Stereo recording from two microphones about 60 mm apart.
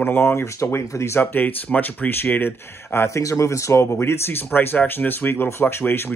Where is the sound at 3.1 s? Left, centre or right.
Left.